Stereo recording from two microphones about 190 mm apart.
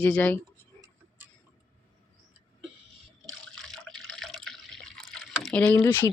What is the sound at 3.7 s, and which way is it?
Water, centre (ahead or behind).